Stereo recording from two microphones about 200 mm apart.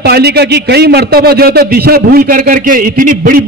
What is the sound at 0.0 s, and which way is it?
A man's voice, 55° right (ahead or behind).